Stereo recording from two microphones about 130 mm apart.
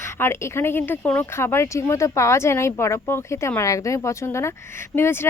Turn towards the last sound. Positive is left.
turn(degrees=20)  # may be behind; listen again after turning